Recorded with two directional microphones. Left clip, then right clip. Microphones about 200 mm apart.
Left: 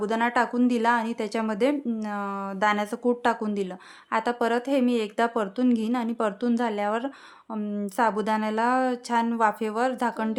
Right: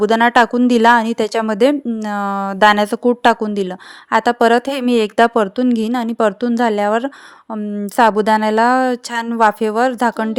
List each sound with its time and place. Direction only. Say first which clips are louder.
0.0 s speech: right 12 dB; 40° right (ahead or behind)